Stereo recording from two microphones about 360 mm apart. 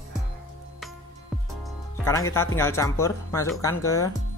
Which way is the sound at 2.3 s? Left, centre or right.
Centre.